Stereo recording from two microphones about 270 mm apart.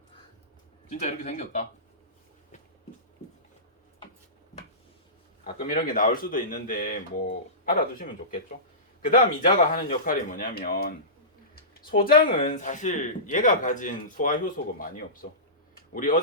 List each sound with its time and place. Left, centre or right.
0.9 s speech: left
5.5 s speech: left